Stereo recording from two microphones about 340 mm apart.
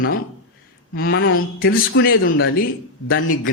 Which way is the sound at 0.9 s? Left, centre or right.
Left.